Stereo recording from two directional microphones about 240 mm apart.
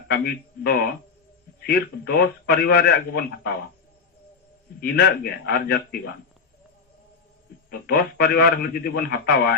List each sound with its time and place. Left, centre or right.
0.1 s a man's voice: left
4.8 s a man's voice: left
7.7 s a man's voice: left